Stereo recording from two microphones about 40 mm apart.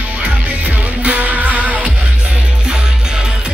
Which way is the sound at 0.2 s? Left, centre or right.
Right.